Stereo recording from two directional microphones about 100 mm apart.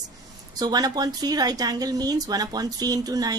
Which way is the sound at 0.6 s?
40° right (ahead or behind).